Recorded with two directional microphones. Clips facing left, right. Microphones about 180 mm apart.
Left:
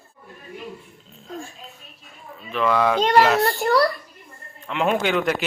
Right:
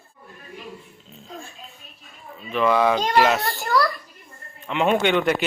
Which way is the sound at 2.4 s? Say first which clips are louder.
Right 1 dB; 5° right (ahead or behind).